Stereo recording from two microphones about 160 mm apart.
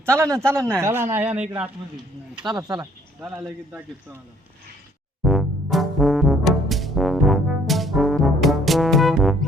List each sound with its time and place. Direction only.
0.0 s a man's voice: 15° right (ahead or behind)
2.4 s speech: 25° right (ahead or behind)
3.2 s a man's voice: 10° right (ahead or behind)
5.2 s music: centre (ahead or behind)